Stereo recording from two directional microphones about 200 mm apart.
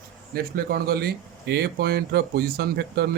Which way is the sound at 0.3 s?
50° right (ahead or behind).